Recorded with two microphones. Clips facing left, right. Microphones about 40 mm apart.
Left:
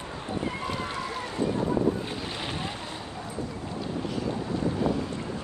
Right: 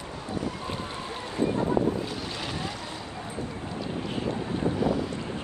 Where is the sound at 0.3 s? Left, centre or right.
Left.